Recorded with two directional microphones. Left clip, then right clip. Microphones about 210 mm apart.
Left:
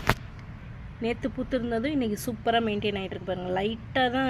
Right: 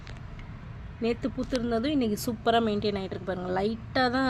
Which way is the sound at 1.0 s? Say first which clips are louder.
Even; 10° right (ahead or behind).